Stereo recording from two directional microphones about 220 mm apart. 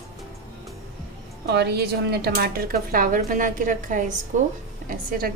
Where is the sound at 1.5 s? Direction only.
50° right (ahead or behind).